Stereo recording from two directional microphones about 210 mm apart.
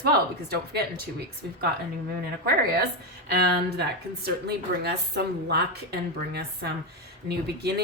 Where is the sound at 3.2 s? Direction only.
50° right (ahead or behind).